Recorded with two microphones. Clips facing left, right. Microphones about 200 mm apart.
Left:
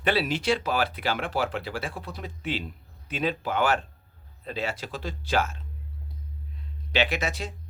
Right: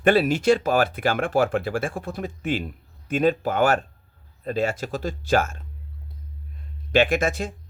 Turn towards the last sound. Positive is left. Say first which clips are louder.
# right 7 dB
turn(degrees=-50)  # may be behind; listen again after turning